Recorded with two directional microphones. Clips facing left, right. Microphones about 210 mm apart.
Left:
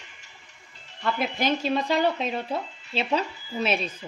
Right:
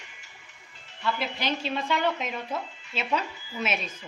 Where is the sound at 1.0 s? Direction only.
50° left (ahead or behind); by 3.9 s 35° left (ahead or behind).